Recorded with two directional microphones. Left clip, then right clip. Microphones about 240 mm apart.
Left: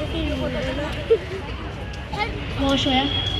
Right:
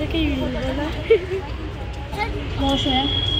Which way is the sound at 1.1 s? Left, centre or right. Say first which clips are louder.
Right 3 dB; right.